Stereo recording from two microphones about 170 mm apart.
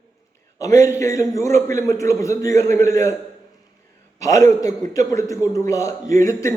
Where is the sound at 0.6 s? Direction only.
20° left (ahead or behind).